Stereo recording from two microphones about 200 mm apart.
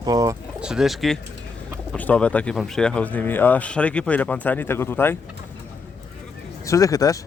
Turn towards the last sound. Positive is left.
turn(degrees=15)  # may be behind; listen again after turning